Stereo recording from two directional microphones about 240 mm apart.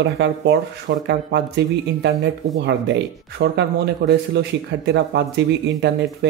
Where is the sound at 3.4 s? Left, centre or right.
Right.